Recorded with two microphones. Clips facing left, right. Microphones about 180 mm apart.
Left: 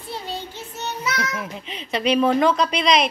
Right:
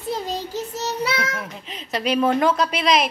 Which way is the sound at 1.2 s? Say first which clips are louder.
Even; 40° right (ahead or behind).